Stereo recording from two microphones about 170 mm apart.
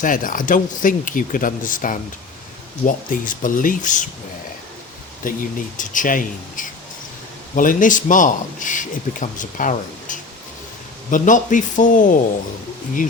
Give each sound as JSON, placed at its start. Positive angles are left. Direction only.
{"t": 0.0, "sound": "a man's voice", "side_deg": 50}
{"t": 5.2, "sound": "a man's voice", "side_deg": 50}